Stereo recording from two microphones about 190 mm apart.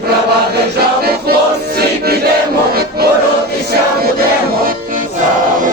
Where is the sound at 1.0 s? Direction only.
55° right (ahead or behind).